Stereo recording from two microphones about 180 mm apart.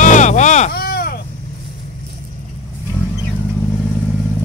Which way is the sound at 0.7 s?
60° left (ahead or behind).